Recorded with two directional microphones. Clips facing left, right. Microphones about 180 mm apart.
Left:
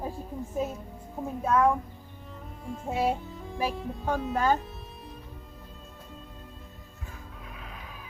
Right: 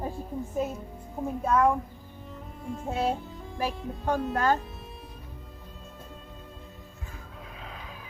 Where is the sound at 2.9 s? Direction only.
5° left (ahead or behind).